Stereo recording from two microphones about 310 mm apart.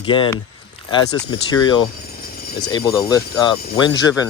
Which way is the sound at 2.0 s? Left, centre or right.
Left.